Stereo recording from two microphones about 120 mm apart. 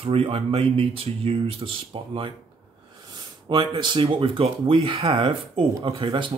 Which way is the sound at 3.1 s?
40° right (ahead or behind).